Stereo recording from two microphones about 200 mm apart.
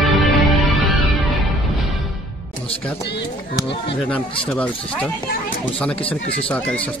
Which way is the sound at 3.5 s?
25° left (ahead or behind).